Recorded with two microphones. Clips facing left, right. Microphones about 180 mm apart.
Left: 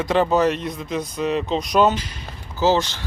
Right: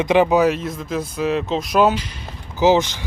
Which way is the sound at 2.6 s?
15° right (ahead or behind).